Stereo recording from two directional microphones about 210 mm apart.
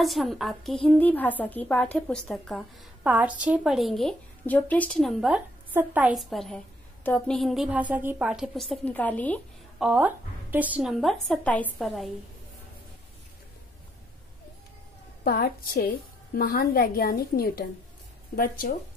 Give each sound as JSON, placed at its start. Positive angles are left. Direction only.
{"t": 0.0, "sound": "a woman's voice", "side_deg": 0}
{"t": 9.8, "sound": "a woman's voice", "side_deg": -10}
{"t": 15.2, "sound": "a woman's voice", "side_deg": 45}